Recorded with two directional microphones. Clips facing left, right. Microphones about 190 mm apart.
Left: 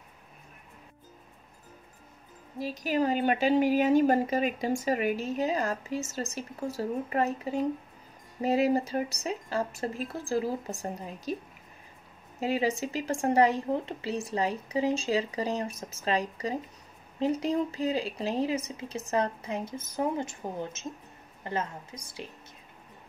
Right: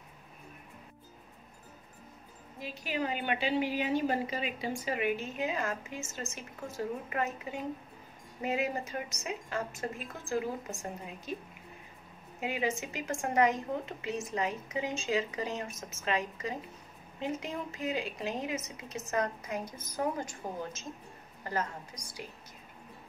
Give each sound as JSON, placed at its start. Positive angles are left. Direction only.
{"t": 2.6, "sound": "a woman's voice", "side_deg": 40}
{"t": 12.4, "sound": "a woman's voice", "side_deg": 35}